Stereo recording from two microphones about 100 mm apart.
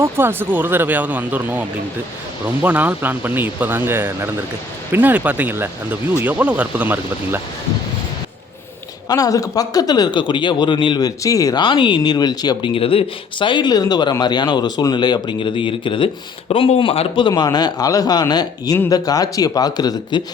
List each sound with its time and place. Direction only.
0.0 s speech: 20° right (ahead or behind)
9.0 s speech: 40° left (ahead or behind); by 11.0 s 55° left (ahead or behind)
11.0 s speech: 35° left (ahead or behind)
11.6 s speech: 50° left (ahead or behind)
12.7 s speech: 70° left (ahead or behind)
17.2 s speech: 45° left (ahead or behind)